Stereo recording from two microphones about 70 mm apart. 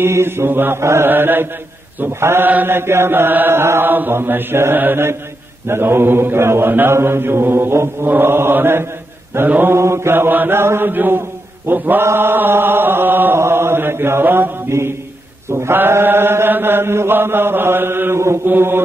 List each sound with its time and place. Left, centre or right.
0.0 s mantra: right
14.7 s a man's voice: right
15.5 s mantra: right